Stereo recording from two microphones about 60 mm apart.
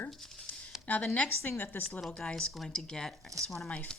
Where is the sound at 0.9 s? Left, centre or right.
Left.